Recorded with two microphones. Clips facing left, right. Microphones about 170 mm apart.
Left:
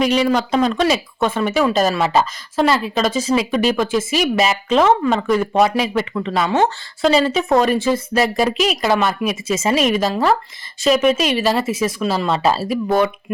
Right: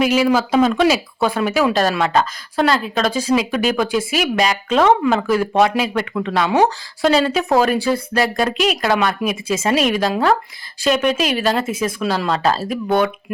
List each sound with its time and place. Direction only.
0.0 s speech: 5° right (ahead or behind)